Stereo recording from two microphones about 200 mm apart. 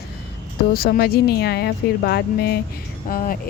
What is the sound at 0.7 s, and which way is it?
Speech, 50° left (ahead or behind).